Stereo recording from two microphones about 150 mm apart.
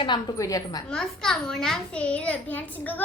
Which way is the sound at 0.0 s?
30° left (ahead or behind).